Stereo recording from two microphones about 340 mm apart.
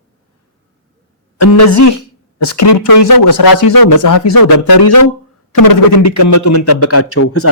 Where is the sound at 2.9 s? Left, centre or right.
Left.